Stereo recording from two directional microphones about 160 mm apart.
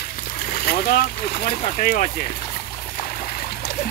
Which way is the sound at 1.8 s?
60° left (ahead or behind).